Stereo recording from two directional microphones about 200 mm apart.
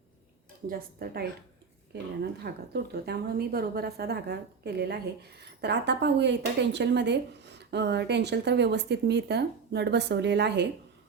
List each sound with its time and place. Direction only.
0.7 s a woman's voice: 50° right (ahead or behind)